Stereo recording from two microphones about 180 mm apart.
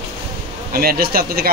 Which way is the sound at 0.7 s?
55° right (ahead or behind).